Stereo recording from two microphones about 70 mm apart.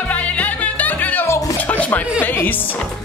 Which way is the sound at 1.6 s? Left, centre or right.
Left.